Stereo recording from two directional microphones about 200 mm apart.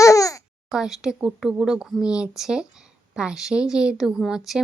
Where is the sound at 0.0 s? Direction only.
15° left (ahead or behind).